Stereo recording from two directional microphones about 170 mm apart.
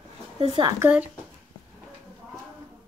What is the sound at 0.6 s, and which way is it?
Speech, 20° right (ahead or behind).